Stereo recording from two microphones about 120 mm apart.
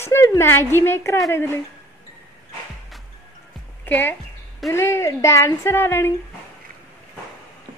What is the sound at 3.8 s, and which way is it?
A woman's voice, 15° left (ahead or behind).